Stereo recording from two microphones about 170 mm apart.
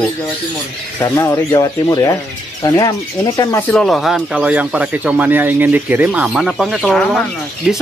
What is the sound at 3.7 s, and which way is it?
Speech, 5° left (ahead or behind).